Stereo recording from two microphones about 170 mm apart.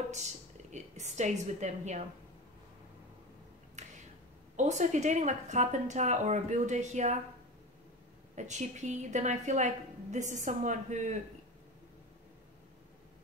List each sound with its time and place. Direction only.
0.1 s a woman's voice: 45° right (ahead or behind)
3.8 s finger snapping: 45° right (ahead or behind)
4.6 s a woman's voice: 45° right (ahead or behind)
8.4 s a woman's voice: 45° right (ahead or behind)